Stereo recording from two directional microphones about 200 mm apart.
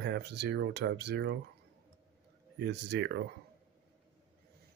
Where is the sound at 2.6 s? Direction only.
55° right (ahead or behind).